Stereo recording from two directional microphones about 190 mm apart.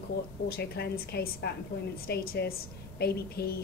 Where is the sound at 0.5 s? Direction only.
55° left (ahead or behind).